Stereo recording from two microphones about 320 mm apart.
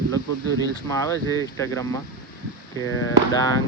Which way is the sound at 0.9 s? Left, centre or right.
Centre.